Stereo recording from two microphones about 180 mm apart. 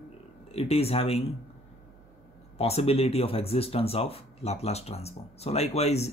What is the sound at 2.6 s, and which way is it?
Speech, 35° left (ahead or behind).